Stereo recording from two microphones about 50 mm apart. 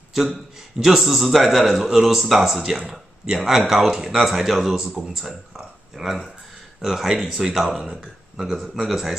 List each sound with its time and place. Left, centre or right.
0.7 s speech: centre